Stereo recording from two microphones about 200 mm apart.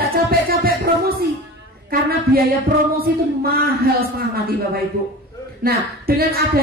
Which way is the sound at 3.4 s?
50° right (ahead or behind).